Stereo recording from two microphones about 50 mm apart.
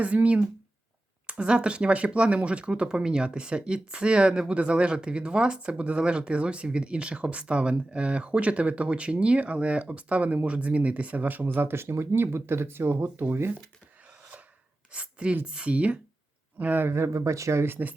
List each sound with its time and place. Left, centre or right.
0.0 s speech: right
14.9 s speech: right
16.8 s speech: right
17.7 s speech: right